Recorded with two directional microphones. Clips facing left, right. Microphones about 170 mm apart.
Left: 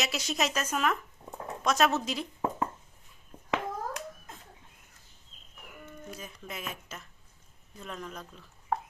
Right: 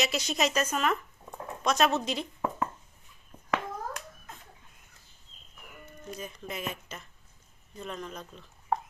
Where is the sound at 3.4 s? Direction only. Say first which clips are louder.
Even; 20° left (ahead or behind).